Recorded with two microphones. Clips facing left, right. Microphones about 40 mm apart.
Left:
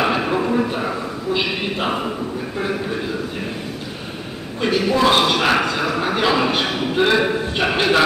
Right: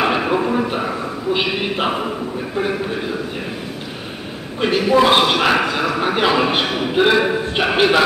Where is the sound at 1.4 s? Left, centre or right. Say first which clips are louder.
Right 2 dB; centre.